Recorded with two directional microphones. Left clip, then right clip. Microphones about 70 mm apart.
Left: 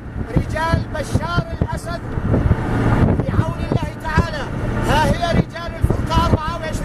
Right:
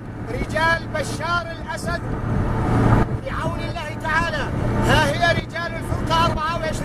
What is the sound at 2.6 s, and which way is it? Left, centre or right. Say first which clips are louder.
Vehicle: even; left.